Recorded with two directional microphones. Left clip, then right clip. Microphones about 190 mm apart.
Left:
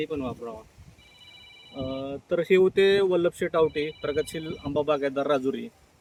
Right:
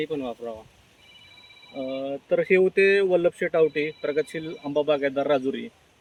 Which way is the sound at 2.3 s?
35° left (ahead or behind).